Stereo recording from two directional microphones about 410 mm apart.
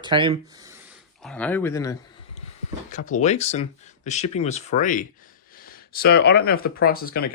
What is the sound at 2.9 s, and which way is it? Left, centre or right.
Speech, centre.